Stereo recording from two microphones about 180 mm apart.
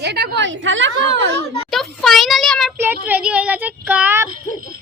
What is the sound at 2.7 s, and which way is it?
Child singing, 10° right (ahead or behind).